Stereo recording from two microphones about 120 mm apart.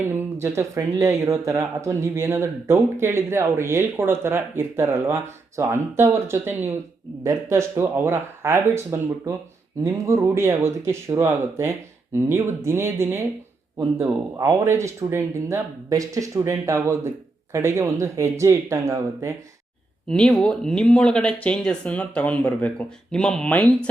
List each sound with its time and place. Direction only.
0.1 s speech: 20° right (ahead or behind)
20.1 s speech: 5° left (ahead or behind)